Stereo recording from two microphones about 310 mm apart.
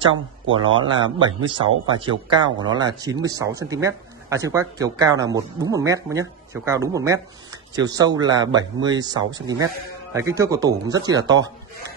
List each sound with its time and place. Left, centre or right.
0.0 s speech: centre